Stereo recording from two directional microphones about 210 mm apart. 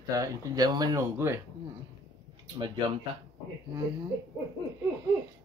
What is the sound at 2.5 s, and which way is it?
Speech, 20° right (ahead or behind).